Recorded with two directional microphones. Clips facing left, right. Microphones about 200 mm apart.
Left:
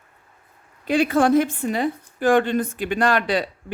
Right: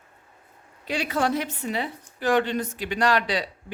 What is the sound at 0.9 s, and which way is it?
A woman's voice, 50° left (ahead or behind).